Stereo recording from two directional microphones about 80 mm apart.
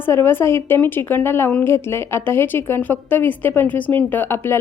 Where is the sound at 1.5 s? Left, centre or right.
Centre.